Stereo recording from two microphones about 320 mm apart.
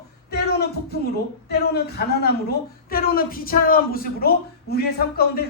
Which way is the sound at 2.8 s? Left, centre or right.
Left.